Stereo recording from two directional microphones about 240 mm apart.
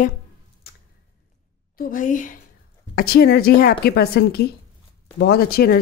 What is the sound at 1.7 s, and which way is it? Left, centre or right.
A woman's voice, left.